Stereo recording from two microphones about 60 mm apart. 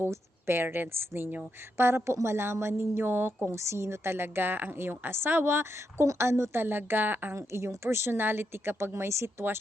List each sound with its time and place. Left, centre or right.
0.0 s a woman's voice: right
6.6 s speech: right
7.3 s a woman's voice: right